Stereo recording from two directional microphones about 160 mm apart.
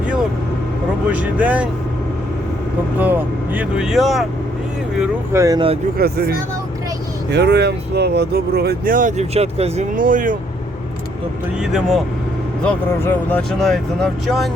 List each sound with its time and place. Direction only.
1.1 s speech: 10° right (ahead or behind)
3.0 s speech: 10° right (ahead or behind)
5.3 s speech: 20° right (ahead or behind)
5.5 s speech: 35° right (ahead or behind)
6.0 s speech: 75° right (ahead or behind)
7.3 s speech: 90° right; by 9.8 s 40° right (ahead or behind)
9.9 s speech: 55° right (ahead or behind)
11.6 s speech: centre (ahead or behind)
12.6 s speech: 10° left (ahead or behind)